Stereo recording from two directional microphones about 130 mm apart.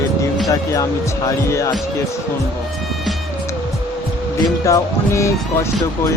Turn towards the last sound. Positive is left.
turn(degrees=25)  # may be behind; listen again after turning